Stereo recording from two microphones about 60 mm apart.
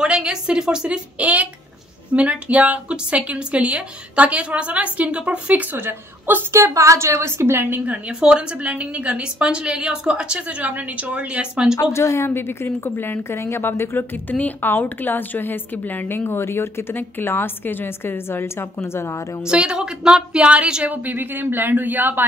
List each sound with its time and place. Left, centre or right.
0.0 s a woman's voice: centre
5.8 s a man's voice: right
6.7 s a woman's voice: right
7.8 s a woman's voice: centre
11.7 s a woman's voice: left
19.4 s a woman's voice: centre
20.9 s a man's voice: right